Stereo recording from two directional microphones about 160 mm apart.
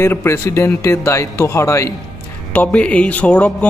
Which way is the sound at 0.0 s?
15° left (ahead or behind).